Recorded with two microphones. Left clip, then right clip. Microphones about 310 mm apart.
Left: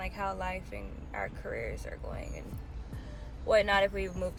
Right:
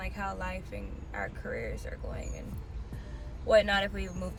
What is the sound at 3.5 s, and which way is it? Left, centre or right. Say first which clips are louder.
Speech: right 1 dB; centre.